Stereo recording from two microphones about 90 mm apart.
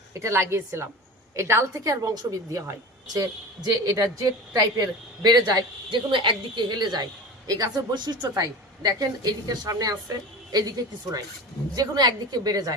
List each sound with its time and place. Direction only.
0.1 s a woman's voice: 30° right (ahead or behind); by 6.0 s 50° right (ahead or behind)
6.1 s a woman's voice: 65° right (ahead or behind)
8.4 s a woman's voice: 45° right (ahead or behind)